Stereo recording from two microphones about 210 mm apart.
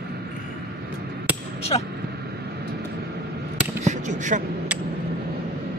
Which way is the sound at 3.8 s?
35° right (ahead or behind).